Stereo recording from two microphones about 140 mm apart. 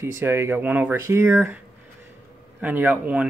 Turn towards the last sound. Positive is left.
turn(degrees=-10)  # may be behind; listen again after turning